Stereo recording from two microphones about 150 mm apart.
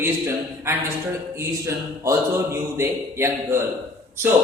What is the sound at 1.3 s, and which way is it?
Speech, 20° right (ahead or behind).